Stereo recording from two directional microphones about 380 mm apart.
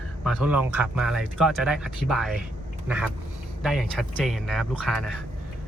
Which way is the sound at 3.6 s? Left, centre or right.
Centre.